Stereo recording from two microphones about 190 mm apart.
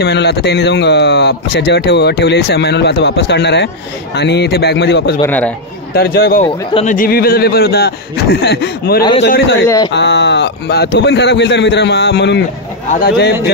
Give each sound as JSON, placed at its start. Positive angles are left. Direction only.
{"t": 0.0, "sound": "speech", "side_deg": 60}
{"t": 5.2, "sound": "speech", "side_deg": 10}
{"t": 5.9, "sound": "speech", "side_deg": 55}
{"t": 6.7, "sound": "speech", "side_deg": 40}
{"t": 12.9, "sound": "speech", "side_deg": 50}